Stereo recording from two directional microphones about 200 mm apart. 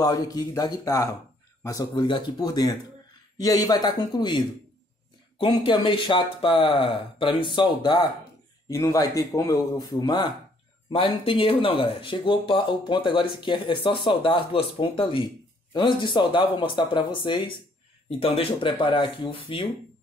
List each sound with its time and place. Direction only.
0.0 s speech: 20° left (ahead or behind)